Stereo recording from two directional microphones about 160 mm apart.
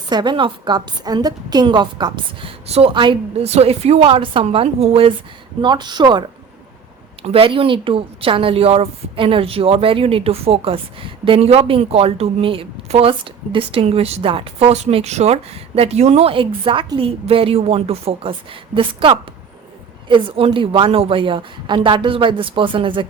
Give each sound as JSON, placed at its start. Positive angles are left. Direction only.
{"t": 0.1, "sound": "a woman's voice", "side_deg": -25}
{"t": 2.6, "sound": "a woman's voice", "side_deg": -40}
{"t": 5.6, "sound": "a woman's voice", "side_deg": -25}